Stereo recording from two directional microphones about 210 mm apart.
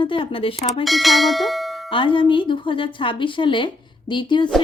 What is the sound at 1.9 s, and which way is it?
A woman's voice, 25° left (ahead or behind).